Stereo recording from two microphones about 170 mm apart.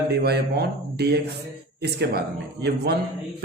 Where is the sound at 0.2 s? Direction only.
75° right (ahead or behind).